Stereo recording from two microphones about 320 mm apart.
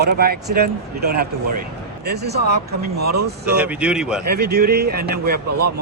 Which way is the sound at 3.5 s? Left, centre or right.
Centre.